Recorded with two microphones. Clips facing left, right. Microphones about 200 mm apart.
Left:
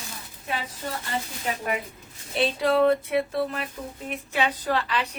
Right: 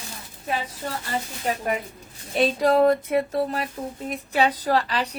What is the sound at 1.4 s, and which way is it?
A woman's voice, 40° right (ahead or behind).